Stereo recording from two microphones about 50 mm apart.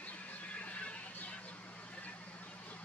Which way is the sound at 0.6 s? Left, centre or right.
Left.